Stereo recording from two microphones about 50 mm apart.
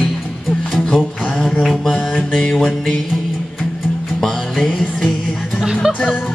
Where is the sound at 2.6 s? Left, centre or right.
Centre.